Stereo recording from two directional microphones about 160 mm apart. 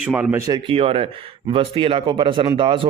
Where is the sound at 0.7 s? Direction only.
35° right (ahead or behind).